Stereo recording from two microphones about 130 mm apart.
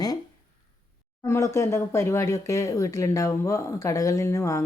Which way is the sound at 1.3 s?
25° left (ahead or behind).